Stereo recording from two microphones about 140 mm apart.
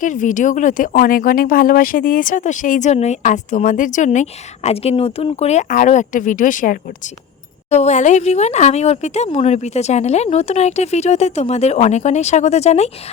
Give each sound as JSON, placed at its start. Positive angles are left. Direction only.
{"t": 0.0, "sound": "speech", "side_deg": 65}
{"t": 7.7, "sound": "speech", "side_deg": 55}